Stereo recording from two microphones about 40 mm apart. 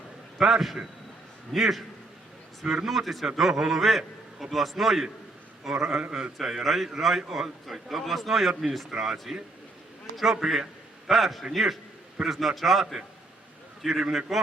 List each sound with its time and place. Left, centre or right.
0.3 s a man's voice: centre
2.8 s a man's voice: centre
6.0 s a man's voice: right
6.3 s a man's voice: centre
10.4 s a man's voice: centre
13.8 s a man's voice: centre